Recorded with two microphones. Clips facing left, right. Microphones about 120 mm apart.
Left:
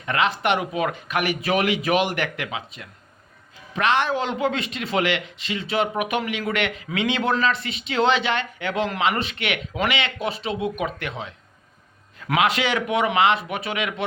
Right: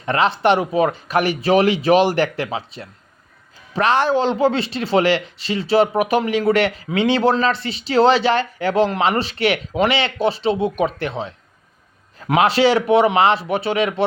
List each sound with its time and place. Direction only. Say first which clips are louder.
0.0 s speech: right 5 dB; 35° right (ahead or behind)